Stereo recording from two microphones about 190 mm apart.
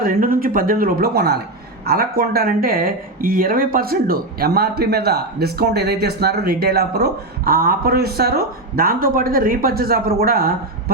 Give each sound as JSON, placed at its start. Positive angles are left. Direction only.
{"t": 0.0, "sound": "speech", "side_deg": -50}